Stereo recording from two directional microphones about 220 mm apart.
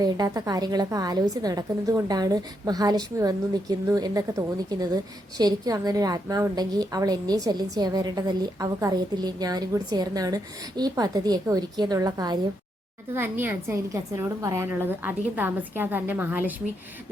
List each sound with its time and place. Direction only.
0.0 s a woman's voice: 15° right (ahead or behind)